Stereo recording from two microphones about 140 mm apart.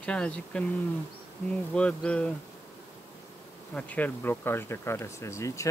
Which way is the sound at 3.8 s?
10° left (ahead or behind).